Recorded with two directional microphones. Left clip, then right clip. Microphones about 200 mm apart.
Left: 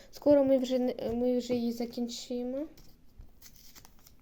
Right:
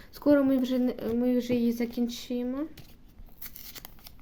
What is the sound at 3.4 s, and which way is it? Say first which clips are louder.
Scissors: right 9 dB; 20° right (ahead or behind).